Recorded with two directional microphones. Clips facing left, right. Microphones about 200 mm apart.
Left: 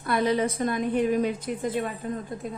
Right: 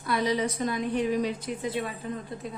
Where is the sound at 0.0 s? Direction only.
55° left (ahead or behind).